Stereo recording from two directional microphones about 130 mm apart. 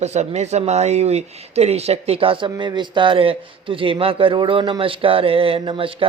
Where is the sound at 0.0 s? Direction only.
60° right (ahead or behind).